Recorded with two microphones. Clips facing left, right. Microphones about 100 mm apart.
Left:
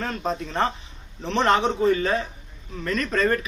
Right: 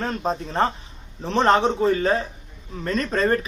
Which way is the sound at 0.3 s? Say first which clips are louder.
Right 2 dB; 35° right (ahead or behind).